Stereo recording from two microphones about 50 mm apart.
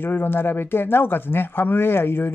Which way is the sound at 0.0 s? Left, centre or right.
Left.